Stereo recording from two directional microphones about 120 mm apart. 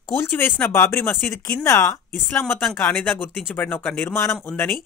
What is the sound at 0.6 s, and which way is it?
Speech, 20° left (ahead or behind).